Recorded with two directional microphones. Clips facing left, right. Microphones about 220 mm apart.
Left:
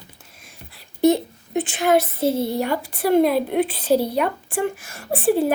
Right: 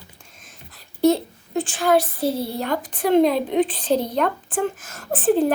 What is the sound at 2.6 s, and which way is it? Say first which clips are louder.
A woman's voice: left 1 dB; 10° left (ahead or behind).